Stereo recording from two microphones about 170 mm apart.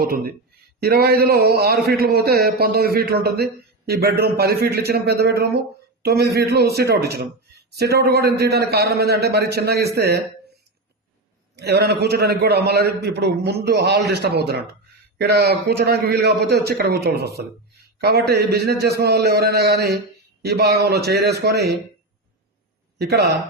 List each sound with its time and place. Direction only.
0.0 s a man's voice: 60° right (ahead or behind)
11.5 s a man's voice: 75° right (ahead or behind)
23.0 s a man's voice: 70° right (ahead or behind)